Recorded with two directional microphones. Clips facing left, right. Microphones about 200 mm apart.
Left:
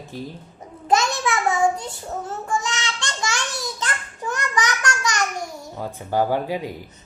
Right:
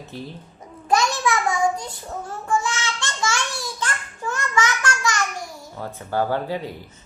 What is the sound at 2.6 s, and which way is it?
Child singing, 20° left (ahead or behind).